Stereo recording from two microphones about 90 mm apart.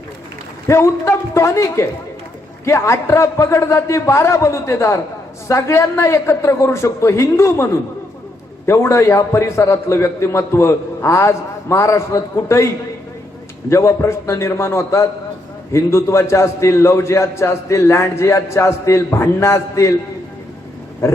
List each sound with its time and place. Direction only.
0.7 s a man's voice: 30° left (ahead or behind)